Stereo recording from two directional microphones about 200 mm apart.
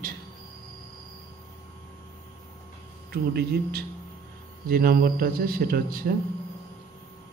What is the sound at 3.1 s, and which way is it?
Speech, 50° right (ahead or behind).